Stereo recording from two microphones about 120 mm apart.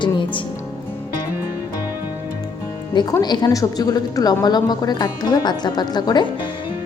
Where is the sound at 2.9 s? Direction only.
35° left (ahead or behind).